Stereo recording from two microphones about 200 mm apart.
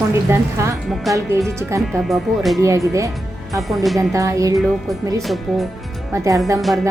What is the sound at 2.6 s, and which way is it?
Speech, 15° right (ahead or behind).